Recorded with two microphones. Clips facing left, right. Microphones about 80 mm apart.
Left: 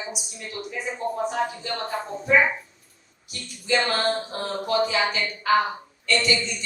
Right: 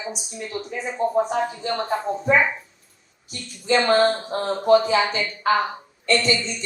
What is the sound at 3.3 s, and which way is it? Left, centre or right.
A woman's voice, right.